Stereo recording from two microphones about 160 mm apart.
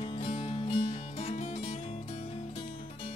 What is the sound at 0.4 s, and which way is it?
Music, 30° left (ahead or behind).